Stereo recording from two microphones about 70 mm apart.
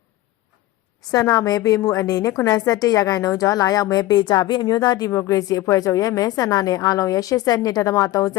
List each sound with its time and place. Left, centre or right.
1.3 s a woman's voice: left
5.1 s a woman's voice: left
5.4 s a woman's voice: left